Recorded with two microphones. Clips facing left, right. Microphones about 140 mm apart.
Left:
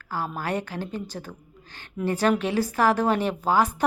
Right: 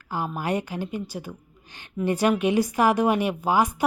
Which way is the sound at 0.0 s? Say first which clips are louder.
Right 1 dB; 15° right (ahead or behind).